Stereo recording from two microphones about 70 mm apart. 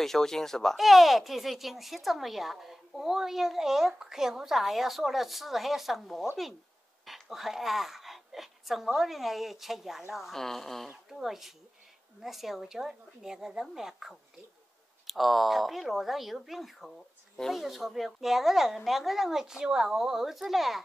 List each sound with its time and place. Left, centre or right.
0.0 s speech: centre